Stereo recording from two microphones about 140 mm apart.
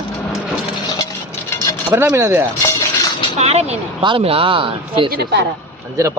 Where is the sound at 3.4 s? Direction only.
50° right (ahead or behind).